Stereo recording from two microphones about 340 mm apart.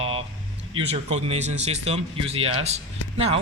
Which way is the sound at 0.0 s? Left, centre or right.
Centre.